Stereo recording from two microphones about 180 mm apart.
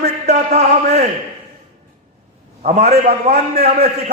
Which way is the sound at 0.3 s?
40° right (ahead or behind).